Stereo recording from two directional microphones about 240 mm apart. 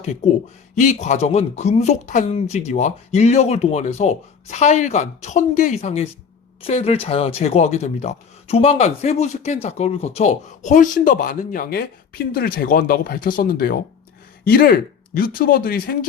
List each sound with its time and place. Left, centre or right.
0.8 s speech: left